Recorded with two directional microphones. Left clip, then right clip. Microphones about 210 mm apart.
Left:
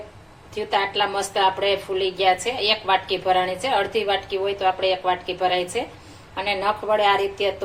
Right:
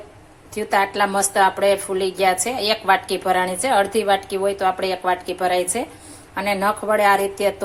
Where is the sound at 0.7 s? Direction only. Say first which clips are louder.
Right 3 dB; 40° right (ahead or behind).